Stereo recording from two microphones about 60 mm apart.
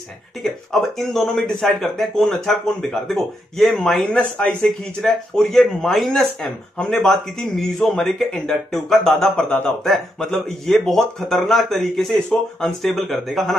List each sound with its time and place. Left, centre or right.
0.4 s speech: centre
4.0 s speech: centre